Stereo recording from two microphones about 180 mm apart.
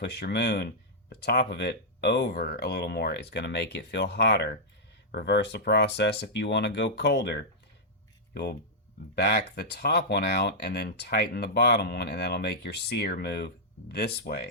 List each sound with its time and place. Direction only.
0.0 s speech: 65° left (ahead or behind)